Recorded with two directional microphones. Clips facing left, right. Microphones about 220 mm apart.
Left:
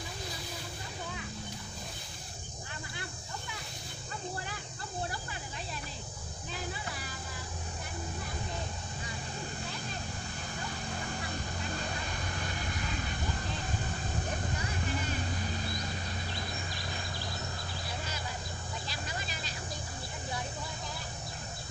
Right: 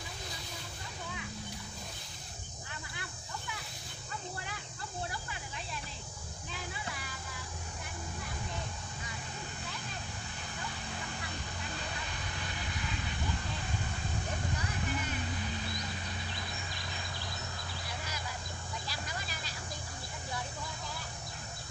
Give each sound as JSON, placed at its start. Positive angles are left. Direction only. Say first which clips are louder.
{"t": 5.1, "sound": "a sound", "louder": "left 2 dB", "side_deg": 40}
{"t": 10.6, "sound": "vehicle", "louder": "left 3 dB", "side_deg": 45}
{"t": 15.0, "sound": "vehicle", "louder": "left 2 dB", "side_deg": 35}
{"t": 18.9, "sound": "vehicle", "louder": "left 2 dB", "side_deg": 20}